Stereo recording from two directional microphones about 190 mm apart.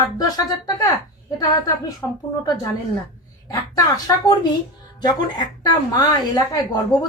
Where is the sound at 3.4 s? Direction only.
20° left (ahead or behind).